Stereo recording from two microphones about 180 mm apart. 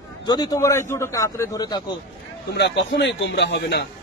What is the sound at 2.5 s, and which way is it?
A man's voice, 70° left (ahead or behind).